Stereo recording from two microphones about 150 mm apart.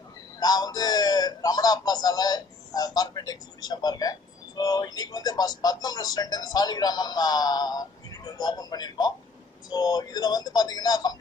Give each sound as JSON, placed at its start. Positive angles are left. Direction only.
{"t": 0.3, "sound": "a man's voice", "side_deg": 25}